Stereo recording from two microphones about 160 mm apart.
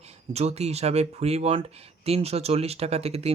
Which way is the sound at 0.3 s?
40° right (ahead or behind).